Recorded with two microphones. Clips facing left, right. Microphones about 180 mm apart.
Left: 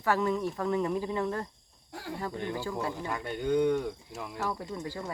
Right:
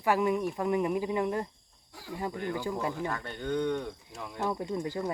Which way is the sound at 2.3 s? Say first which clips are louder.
Right 1 dB; 20° left (ahead or behind).